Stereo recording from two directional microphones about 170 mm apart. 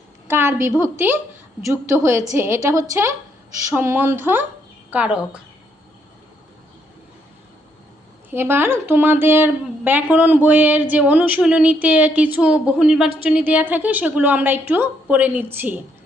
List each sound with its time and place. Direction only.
0.3 s a sound: 15° right (ahead or behind)
0.8 s a woman's voice: 15° right (ahead or behind)
8.3 s a woman's voice: 15° right (ahead or behind)